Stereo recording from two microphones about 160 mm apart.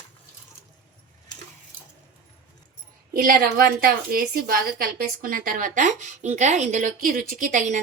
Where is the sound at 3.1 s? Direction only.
65° right (ahead or behind).